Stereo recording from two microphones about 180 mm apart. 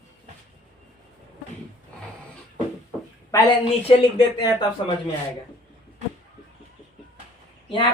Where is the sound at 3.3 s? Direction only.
20° left (ahead or behind).